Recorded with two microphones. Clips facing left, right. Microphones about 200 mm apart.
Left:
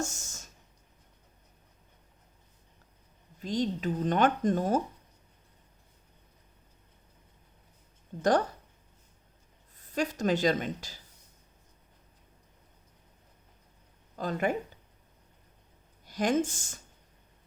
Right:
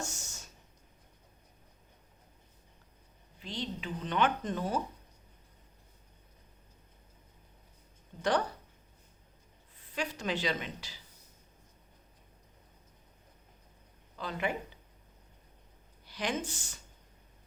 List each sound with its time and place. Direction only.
0.0 s a sound: 45° left (ahead or behind)
3.4 s speech: 45° left (ahead or behind)
8.2 s speech: 45° left (ahead or behind)
9.7 s a woman's voice: 45° left (ahead or behind)
14.2 s speech: 45° left (ahead or behind)
16.0 s speech: 45° left (ahead or behind)